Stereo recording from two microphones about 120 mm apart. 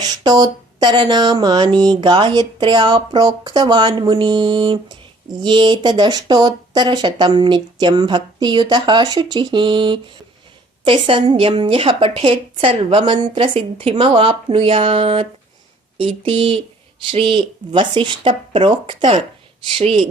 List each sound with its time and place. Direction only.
0.0 s a woman's voice: 35° right (ahead or behind)
19.7 s a woman's voice: 55° right (ahead or behind)